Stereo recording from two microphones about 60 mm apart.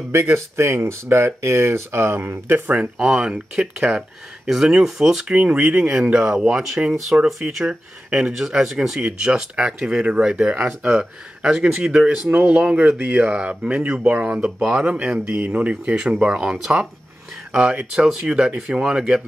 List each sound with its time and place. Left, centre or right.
0.1 s speech: right
3.1 s speech: centre
12.3 s speech: right
15.8 s speech: right